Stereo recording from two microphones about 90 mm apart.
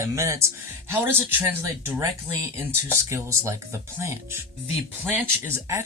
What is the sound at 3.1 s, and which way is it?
Speech, 30° right (ahead or behind).